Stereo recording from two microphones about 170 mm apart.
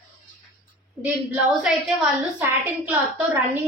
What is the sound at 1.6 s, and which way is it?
A woman's voice, centre (ahead or behind).